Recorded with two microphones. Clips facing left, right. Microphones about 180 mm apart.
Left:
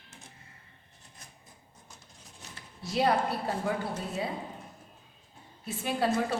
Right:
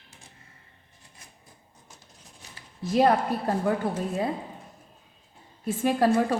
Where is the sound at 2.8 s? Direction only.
50° right (ahead or behind).